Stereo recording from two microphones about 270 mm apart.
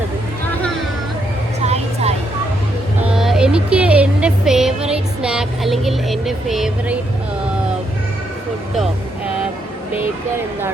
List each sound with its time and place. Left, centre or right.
1.6 s vehicle: right
3.1 s speech: centre
8.7 s vehicle: centre